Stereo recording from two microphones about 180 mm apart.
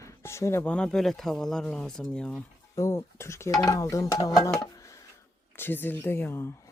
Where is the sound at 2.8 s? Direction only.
15° left (ahead or behind).